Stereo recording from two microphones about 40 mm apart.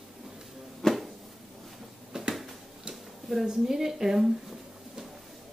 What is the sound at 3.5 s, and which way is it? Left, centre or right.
Speech, centre.